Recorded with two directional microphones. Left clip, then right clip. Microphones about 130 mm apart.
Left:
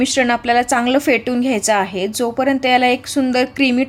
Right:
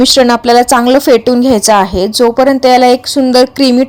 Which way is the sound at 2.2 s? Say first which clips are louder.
Right 10 dB; 40° right (ahead or behind).